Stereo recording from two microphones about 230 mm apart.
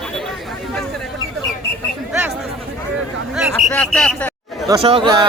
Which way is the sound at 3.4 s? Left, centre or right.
Centre.